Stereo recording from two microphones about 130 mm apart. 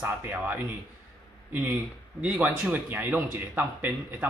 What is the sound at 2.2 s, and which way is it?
A man's voice, 10° right (ahead or behind).